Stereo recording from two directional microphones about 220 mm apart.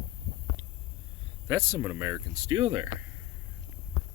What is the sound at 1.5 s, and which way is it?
Speech, 10° right (ahead or behind).